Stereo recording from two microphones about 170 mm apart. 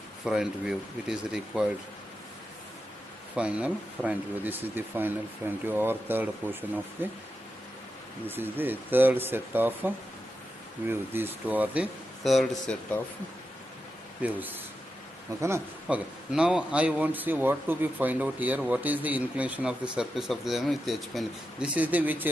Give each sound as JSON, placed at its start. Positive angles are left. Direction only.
{"t": 0.2, "sound": "speech", "side_deg": -5}
{"t": 3.3, "sound": "speech", "side_deg": -5}
{"t": 8.3, "sound": "speech", "side_deg": -10}
{"t": 14.2, "sound": "speech", "side_deg": -10}
{"t": 16.3, "sound": "speech", "side_deg": -5}